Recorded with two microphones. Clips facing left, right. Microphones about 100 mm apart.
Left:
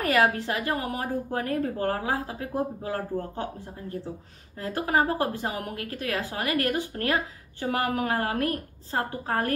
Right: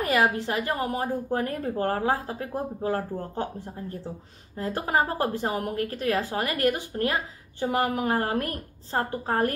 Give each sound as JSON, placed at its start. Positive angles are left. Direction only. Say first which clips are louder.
{"t": 0.0, "sound": "a woman's voice", "louder": "even", "side_deg": -20}
{"t": 4.6, "sound": "a woman's voice", "louder": "even", "side_deg": -30}